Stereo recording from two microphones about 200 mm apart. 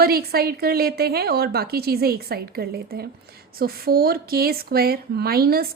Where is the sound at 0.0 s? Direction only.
50° right (ahead or behind).